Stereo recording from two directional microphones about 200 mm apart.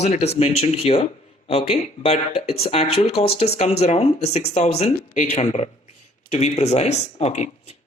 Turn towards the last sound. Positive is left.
turn(degrees=35)  # may be behind; listen again after turning